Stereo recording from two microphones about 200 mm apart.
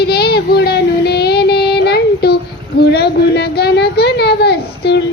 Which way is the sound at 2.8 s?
55° left (ahead or behind).